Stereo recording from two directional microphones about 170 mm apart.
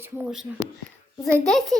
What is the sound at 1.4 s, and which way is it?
Speech, centre (ahead or behind).